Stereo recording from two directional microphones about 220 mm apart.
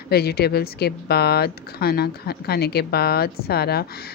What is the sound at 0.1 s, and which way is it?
Speech, 45° left (ahead or behind).